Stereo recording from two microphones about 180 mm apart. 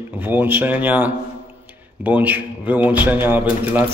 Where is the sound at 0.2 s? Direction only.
10° right (ahead or behind).